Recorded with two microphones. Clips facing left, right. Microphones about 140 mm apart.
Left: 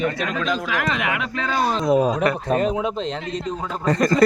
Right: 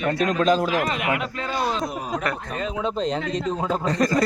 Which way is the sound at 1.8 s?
90° left.